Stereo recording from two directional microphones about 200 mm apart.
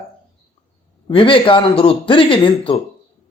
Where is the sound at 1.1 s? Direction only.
25° left (ahead or behind).